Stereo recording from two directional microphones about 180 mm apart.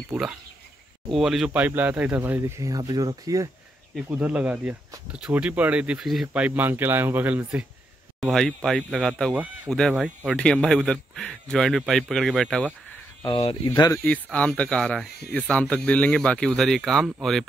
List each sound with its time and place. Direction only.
0.1 s speech: 5° right (ahead or behind); by 3.4 s 20° right (ahead or behind)
4.1 s speech: 10° right (ahead or behind)
13.2 s speech: 30° left (ahead or behind)
13.7 s speech: 20° left (ahead or behind)
14.0 s speech: 5° left (ahead or behind)